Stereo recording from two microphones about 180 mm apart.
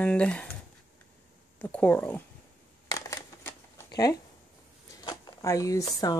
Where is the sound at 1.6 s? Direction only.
10° left (ahead or behind).